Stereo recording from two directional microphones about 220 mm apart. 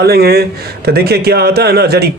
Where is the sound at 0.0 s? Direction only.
45° right (ahead or behind).